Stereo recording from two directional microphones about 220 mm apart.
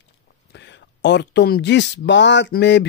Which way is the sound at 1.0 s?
50° left (ahead or behind).